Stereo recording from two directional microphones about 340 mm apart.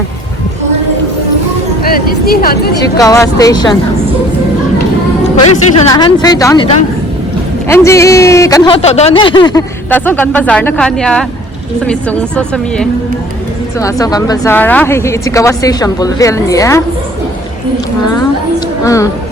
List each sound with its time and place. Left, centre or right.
1.8 s speech: left
2.8 s speech: centre
5.5 s a woman's voice: centre